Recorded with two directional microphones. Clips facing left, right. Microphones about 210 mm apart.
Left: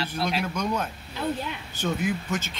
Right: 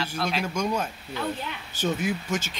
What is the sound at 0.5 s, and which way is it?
Speech, 10° right (ahead or behind).